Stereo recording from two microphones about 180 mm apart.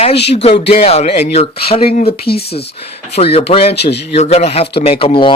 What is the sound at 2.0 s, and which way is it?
Speech, 60° left (ahead or behind).